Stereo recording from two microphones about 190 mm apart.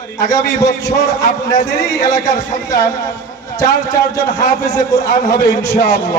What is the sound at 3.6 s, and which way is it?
A man's voice, 20° left (ahead or behind).